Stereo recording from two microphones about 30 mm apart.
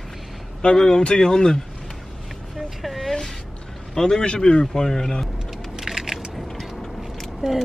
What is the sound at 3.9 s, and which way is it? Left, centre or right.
Speech, left.